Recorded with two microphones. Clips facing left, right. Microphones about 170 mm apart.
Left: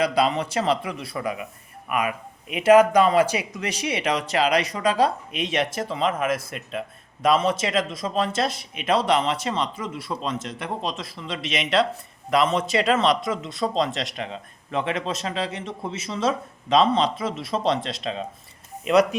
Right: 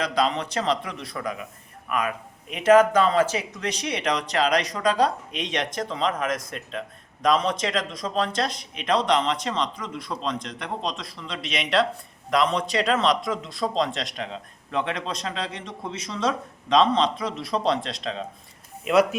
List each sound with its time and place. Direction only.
0.0 s speech: 10° left (ahead or behind)